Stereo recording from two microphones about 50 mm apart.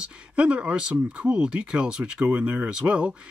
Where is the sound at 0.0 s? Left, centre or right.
Right.